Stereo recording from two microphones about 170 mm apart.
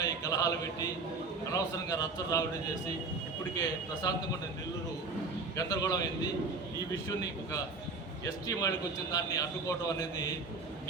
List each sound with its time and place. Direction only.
0.0 s a man's voice: 20° left (ahead or behind)
3.6 s a man's voice: 20° left (ahead or behind)
5.5 s a man's voice: 20° left (ahead or behind)
7.1 s a man's voice: 20° left (ahead or behind)